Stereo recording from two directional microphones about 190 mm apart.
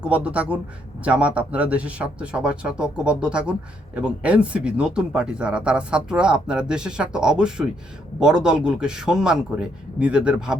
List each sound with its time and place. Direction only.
0.0 s a man's voice: 5° right (ahead or behind)